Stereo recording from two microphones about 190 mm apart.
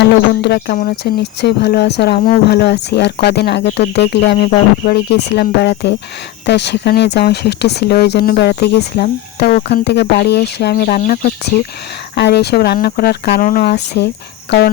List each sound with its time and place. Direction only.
0.0 s speech: 60° left (ahead or behind)